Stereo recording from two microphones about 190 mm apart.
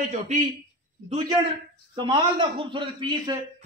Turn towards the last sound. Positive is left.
turn(degrees=-25)  # may be behind; listen again after turning